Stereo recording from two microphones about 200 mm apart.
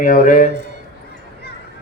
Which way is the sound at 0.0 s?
45° left (ahead or behind).